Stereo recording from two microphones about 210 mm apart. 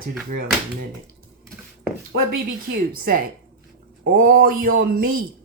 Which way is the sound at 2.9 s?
45° right (ahead or behind).